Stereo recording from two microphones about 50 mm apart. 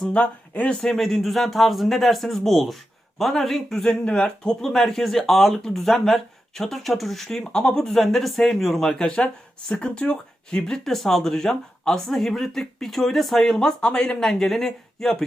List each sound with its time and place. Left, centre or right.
0.0 s speech: left
0.8 s a man's voice: centre
4.0 s speech: centre